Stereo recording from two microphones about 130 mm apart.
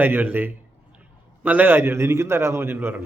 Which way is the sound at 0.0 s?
15° right (ahead or behind).